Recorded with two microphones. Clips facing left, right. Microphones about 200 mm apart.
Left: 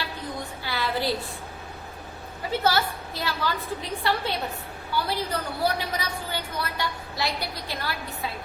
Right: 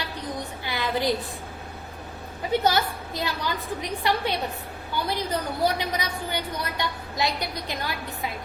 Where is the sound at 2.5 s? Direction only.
20° right (ahead or behind).